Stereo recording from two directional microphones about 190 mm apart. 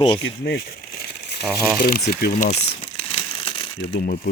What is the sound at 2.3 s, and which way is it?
Crumpling, 35° left (ahead or behind).